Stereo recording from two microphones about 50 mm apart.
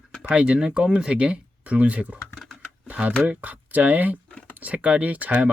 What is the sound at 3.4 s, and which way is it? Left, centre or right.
Speech, right.